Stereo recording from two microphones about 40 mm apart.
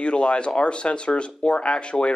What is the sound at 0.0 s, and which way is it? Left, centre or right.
Speech, left.